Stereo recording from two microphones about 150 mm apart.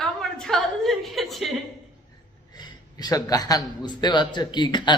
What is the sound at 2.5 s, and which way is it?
A man's voice, 30° left (ahead or behind).